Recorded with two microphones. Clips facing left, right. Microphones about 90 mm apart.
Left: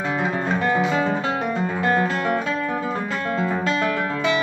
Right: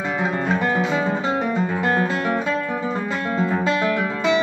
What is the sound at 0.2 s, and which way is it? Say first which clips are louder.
Guitar: right 3 dB; 10° right (ahead or behind).